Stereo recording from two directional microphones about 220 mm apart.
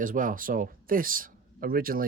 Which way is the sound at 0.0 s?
35° right (ahead or behind).